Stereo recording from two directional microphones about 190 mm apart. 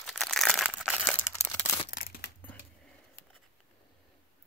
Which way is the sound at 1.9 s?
50° left (ahead or behind).